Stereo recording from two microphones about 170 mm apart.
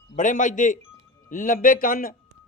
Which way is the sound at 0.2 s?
50° left (ahead or behind).